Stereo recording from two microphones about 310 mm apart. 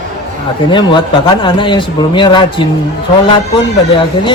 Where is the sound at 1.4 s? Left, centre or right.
Centre.